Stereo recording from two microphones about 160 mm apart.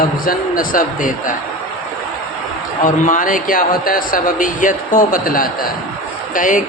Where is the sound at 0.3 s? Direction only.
60° left (ahead or behind).